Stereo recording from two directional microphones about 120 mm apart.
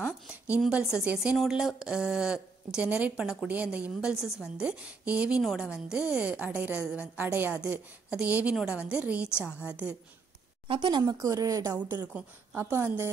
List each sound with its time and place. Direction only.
0.3 s speech: 10° right (ahead or behind)
10.7 s speech: 40° right (ahead or behind); by 13.1 s 20° right (ahead or behind)